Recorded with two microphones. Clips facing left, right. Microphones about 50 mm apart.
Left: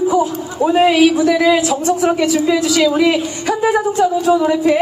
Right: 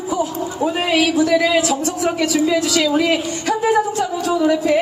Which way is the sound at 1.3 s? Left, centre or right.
Centre.